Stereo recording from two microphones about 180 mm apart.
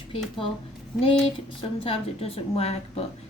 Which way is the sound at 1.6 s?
30° left (ahead or behind).